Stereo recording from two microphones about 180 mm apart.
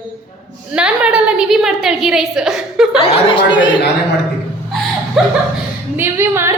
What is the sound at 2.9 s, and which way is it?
Speech, 30° left (ahead or behind).